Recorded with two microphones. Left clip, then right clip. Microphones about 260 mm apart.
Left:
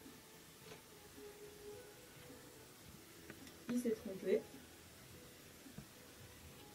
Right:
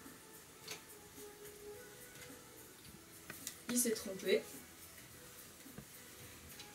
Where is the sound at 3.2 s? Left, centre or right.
Centre.